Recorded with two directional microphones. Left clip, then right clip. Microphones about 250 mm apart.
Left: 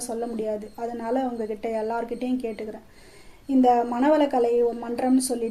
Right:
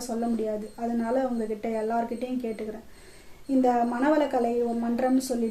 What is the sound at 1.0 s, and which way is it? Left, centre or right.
A woman's voice, left.